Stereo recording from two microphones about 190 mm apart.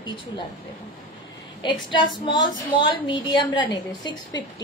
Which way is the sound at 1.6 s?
25° left (ahead or behind).